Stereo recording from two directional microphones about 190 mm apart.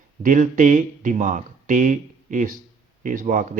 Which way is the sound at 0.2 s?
45° right (ahead or behind).